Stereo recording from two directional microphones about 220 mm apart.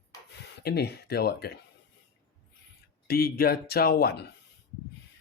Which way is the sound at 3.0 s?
45° left (ahead or behind).